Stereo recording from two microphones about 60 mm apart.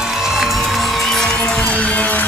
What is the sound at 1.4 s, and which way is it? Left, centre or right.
Music, left.